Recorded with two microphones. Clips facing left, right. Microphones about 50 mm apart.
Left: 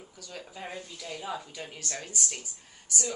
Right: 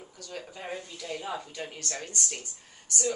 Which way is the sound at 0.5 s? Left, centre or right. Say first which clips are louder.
Even; centre.